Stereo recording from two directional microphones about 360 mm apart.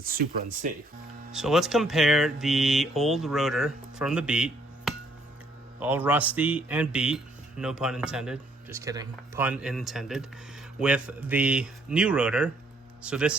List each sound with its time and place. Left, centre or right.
0.0 s speech: right
1.3 s speech: centre